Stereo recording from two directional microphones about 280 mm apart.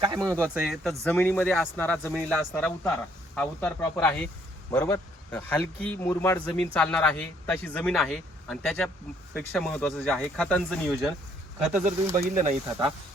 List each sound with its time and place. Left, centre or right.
0.0 s a man's voice: centre
12.1 s speech: right